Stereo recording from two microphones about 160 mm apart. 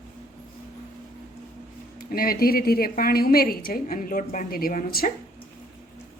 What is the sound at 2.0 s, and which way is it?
A woman's voice, 65° left (ahead or behind).